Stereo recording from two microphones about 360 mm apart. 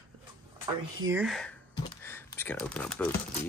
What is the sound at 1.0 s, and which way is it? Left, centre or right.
Speech, centre.